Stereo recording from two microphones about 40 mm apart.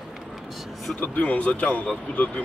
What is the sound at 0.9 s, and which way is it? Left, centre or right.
Speech, left.